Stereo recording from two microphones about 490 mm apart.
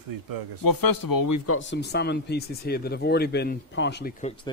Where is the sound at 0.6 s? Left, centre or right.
Left.